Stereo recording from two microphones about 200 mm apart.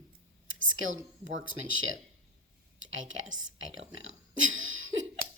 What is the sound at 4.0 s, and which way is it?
Speech, 80° right.